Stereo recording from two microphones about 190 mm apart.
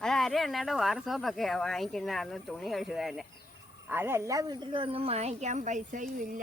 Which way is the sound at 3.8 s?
10° right (ahead or behind).